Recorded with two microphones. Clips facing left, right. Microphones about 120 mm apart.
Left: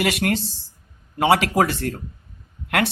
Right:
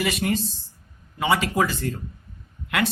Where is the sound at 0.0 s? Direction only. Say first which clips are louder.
Left 2 dB; 75° left (ahead or behind).